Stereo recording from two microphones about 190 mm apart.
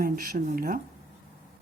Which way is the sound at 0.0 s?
50° right (ahead or behind).